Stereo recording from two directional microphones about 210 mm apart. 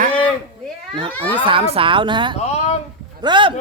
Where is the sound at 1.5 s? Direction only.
25° right (ahead or behind).